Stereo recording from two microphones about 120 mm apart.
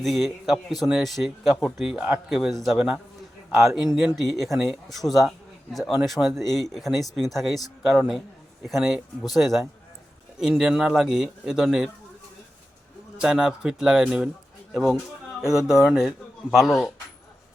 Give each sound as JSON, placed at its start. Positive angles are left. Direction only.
{"t": 0.0, "sound": "a man's voice", "side_deg": 0}
{"t": 13.1, "sound": "a man's voice", "side_deg": -5}
{"t": 15.4, "sound": "a man's voice", "side_deg": -5}